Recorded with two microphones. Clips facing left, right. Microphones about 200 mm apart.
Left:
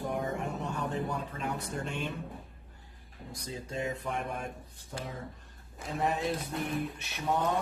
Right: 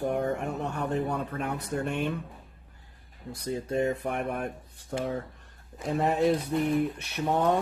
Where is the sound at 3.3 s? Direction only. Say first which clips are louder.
Right 9 dB; 60° right (ahead or behind).